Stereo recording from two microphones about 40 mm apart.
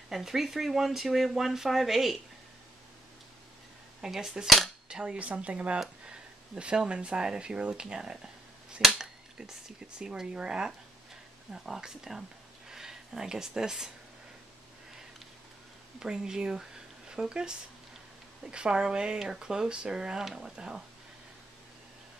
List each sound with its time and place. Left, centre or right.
0.1 s speech: centre
4.0 s speech: centre
4.8 s cutlery: right
5.2 s speech: right; by 12.2 s centre
12.6 s a sound: centre
16.0 s a woman's voice: centre